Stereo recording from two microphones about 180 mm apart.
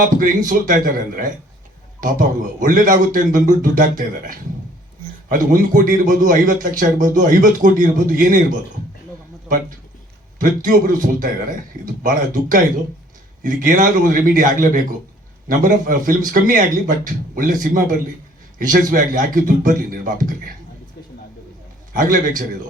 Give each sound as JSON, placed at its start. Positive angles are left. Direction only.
{"t": 0.0, "sound": "a man's voice", "side_deg": -45}
{"t": 10.3, "sound": "a man's voice", "side_deg": -45}
{"t": 21.9, "sound": "a man's voice", "side_deg": -50}